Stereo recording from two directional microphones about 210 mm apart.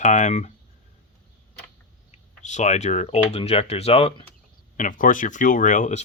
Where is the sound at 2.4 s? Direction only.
35° left (ahead or behind).